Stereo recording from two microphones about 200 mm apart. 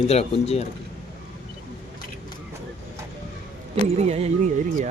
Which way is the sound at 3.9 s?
30° right (ahead or behind).